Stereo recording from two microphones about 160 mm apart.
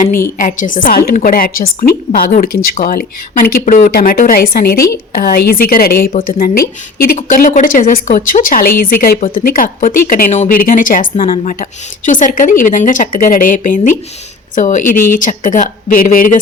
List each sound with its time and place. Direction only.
0.3 s a woman's voice: 55° left (ahead or behind)